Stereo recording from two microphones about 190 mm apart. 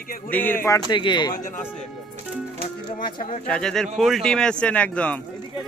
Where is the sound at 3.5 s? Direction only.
5° left (ahead or behind).